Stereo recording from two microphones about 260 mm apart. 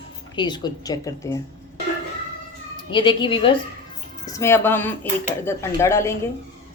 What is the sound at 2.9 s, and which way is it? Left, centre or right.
A woman's voice, centre.